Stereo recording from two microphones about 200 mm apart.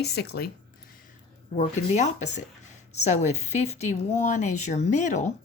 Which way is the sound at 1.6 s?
35° left (ahead or behind).